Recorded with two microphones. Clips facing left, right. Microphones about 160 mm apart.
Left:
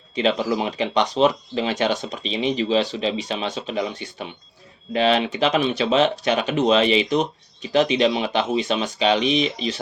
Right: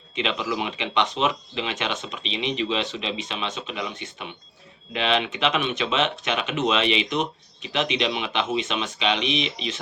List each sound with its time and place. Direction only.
0.2 s speech: 40° left (ahead or behind)